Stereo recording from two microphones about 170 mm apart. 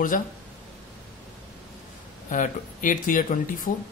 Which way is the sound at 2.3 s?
50° left (ahead or behind).